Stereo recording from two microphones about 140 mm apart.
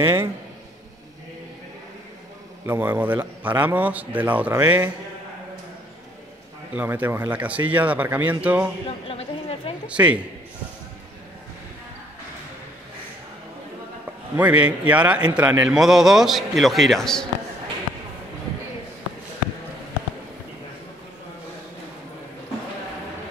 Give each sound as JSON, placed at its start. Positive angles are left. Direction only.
{"t": 0.0, "sound": "a man's voice", "side_deg": -15}
{"t": 2.6, "sound": "a man's voice", "side_deg": -15}
{"t": 6.7, "sound": "a man's voice", "side_deg": -15}
{"t": 8.8, "sound": "chatter", "side_deg": 45}
{"t": 9.8, "sound": "a man's voice", "side_deg": -10}
{"t": 14.3, "sound": "a man's voice", "side_deg": -10}